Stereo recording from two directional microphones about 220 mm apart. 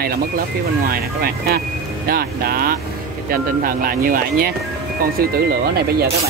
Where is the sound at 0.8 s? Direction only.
40° right (ahead or behind).